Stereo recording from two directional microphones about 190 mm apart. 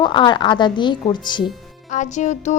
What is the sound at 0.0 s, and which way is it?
A woman's voice, 25° left (ahead or behind).